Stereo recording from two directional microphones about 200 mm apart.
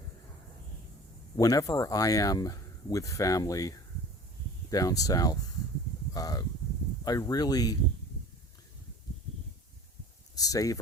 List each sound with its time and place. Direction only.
1.4 s speech: 15° left (ahead or behind)
10.3 s speech: 15° left (ahead or behind)